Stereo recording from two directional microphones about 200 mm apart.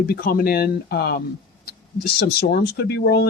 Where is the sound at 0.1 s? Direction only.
50° left (ahead or behind).